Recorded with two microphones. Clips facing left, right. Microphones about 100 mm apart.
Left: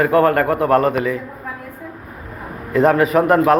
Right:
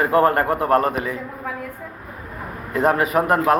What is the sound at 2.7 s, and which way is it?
Speech, 20° right (ahead or behind).